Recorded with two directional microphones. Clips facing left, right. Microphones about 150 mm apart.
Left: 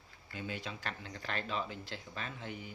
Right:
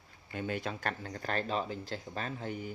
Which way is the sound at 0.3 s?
50° right (ahead or behind).